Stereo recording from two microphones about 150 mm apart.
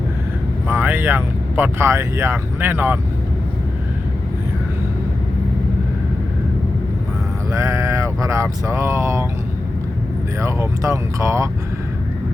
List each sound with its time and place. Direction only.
0.7 s speech: 15° right (ahead or behind)
7.5 s speech: 20° right (ahead or behind)
10.4 s speech: 20° right (ahead or behind)